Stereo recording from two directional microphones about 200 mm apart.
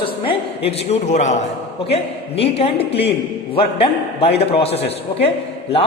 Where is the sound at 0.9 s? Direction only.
35° left (ahead or behind).